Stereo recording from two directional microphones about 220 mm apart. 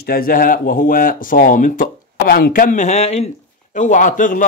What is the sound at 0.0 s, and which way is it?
Speech, 40° left (ahead or behind).